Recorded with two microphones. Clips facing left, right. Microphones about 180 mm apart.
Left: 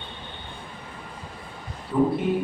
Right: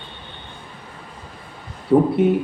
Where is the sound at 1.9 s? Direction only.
65° right (ahead or behind).